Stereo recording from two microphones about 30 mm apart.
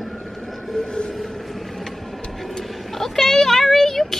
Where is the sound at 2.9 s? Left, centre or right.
Centre.